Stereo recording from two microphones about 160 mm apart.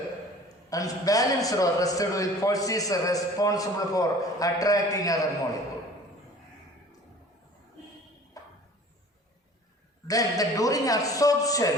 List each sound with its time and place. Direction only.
0.4 s a man's voice: 20° left (ahead or behind)
8.4 s a sound: 20° left (ahead or behind)
10.1 s a man's voice: 20° left (ahead or behind)